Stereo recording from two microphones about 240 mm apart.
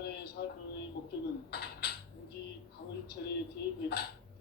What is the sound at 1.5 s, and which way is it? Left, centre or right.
Creak, left.